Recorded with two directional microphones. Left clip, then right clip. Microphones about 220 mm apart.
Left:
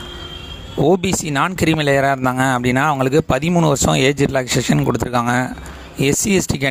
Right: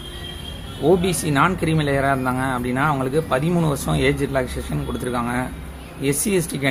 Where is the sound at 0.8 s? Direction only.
45° left (ahead or behind).